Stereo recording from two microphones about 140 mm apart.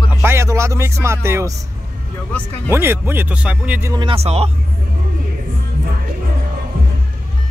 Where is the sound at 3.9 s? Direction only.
40° right (ahead or behind).